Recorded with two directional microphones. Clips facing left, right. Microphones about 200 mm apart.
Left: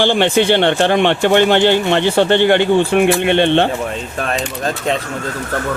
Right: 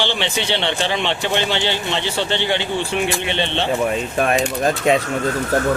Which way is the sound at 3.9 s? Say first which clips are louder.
Right 3 dB; 15° right (ahead or behind).